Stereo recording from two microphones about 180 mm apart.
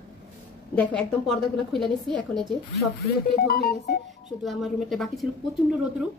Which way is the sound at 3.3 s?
55° left (ahead or behind).